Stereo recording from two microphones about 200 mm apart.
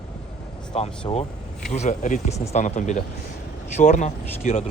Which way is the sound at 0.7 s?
30° left (ahead or behind).